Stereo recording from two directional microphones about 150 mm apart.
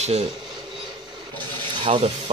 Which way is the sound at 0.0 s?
45° right (ahead or behind).